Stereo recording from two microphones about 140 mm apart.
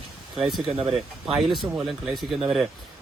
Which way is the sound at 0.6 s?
45° right (ahead or behind).